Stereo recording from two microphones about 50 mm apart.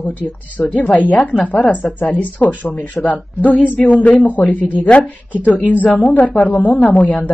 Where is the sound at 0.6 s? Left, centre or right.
Left.